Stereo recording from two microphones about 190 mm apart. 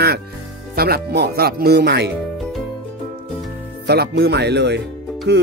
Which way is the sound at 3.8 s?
60° right (ahead or behind).